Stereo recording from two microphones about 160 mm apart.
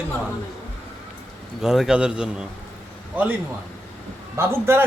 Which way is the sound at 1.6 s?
5° right (ahead or behind).